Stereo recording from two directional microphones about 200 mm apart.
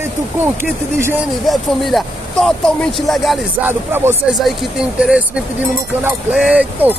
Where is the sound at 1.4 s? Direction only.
Centre (ahead or behind).